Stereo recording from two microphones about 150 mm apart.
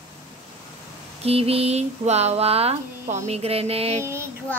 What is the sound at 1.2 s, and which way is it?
Speech, 40° right (ahead or behind).